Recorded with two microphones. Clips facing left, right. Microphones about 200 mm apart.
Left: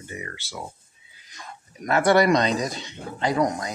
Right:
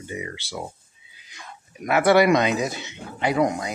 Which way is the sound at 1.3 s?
5° right (ahead or behind).